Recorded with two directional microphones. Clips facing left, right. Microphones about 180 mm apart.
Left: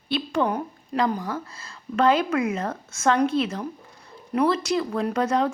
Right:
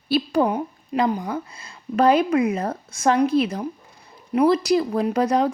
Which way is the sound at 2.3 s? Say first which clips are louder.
Right 4 dB; 30° right (ahead or behind).